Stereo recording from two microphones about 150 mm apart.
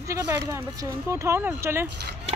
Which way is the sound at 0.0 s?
20° right (ahead or behind).